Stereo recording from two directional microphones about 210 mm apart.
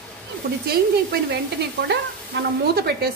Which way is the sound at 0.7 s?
50° right (ahead or behind).